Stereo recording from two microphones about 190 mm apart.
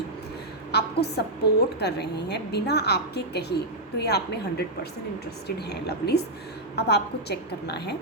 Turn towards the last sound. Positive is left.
turn(degrees=60)  # may be behind; listen again after turning